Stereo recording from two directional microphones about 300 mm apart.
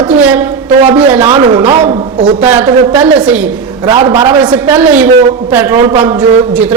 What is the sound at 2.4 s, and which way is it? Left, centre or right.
A man's voice, centre.